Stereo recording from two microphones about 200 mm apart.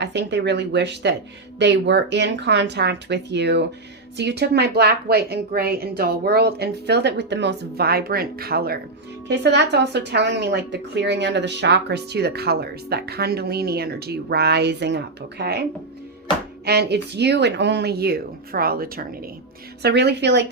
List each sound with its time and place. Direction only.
0.0 s a woman's voice: 60° right (ahead or behind)
16.6 s a woman's voice: 55° right (ahead or behind)